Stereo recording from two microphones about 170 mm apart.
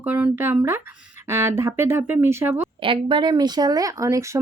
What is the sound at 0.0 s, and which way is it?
Speech, 10° right (ahead or behind).